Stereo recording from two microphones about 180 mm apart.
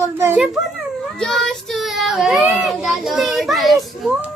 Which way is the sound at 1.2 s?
5° left (ahead or behind).